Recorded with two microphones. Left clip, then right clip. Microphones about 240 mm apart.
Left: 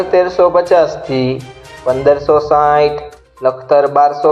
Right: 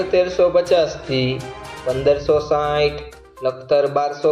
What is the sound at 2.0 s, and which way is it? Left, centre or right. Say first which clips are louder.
A man's voice: left 6 dB; centre.